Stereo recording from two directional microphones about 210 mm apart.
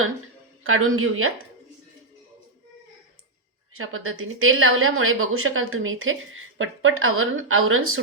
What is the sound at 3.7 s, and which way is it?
A woman's voice, 80° right.